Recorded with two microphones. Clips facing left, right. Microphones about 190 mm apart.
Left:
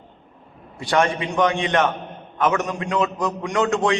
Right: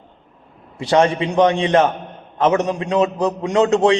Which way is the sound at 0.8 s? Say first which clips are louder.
Right 5 dB; 25° right (ahead or behind).